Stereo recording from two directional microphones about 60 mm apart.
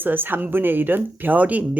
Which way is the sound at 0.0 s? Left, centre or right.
Right.